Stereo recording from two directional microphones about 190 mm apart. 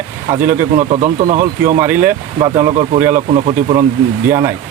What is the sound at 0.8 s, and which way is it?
Speech, 35° right (ahead or behind).